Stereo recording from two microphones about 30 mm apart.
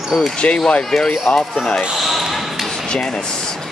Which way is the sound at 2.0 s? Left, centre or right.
Centre.